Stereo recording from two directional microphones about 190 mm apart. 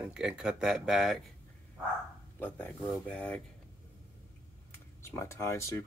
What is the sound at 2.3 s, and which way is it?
Speech, 10° left (ahead or behind).